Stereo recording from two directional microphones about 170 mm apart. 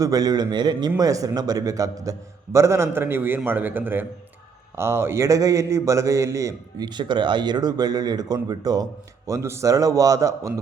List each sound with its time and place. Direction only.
0.0 s a man's voice: 20° right (ahead or behind)